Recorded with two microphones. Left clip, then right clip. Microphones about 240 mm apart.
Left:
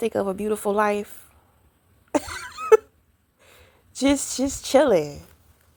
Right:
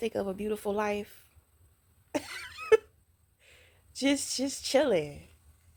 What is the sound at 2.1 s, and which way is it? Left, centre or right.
Cough, centre.